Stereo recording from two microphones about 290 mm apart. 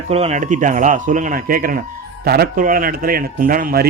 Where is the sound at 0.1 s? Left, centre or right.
Right.